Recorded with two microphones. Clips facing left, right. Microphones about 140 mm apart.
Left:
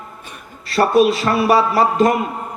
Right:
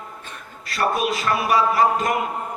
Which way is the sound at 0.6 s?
30° left (ahead or behind).